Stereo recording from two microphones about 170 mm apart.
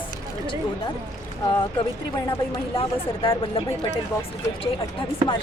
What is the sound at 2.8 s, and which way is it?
Speech, 30° left (ahead or behind).